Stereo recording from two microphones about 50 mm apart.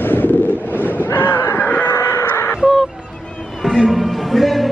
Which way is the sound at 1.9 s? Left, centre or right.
Left.